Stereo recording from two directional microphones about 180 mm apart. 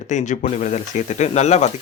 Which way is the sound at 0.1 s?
40° left (ahead or behind).